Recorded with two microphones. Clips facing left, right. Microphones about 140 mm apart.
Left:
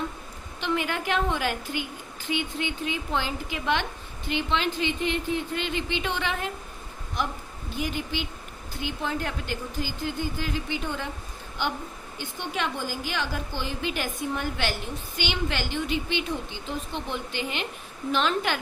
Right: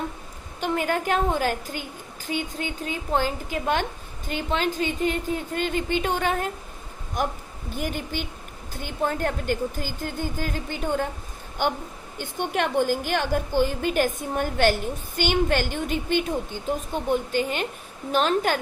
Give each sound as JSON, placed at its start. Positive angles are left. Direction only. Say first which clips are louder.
{"t": 0.6, "sound": "a woman's voice", "louder": "right 3 dB", "side_deg": -45}